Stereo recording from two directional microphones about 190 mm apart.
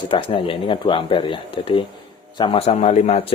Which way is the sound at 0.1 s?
25° left (ahead or behind).